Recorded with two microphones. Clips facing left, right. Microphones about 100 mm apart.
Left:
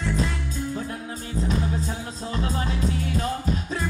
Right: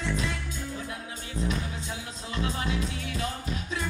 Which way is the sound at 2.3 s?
35° left (ahead or behind).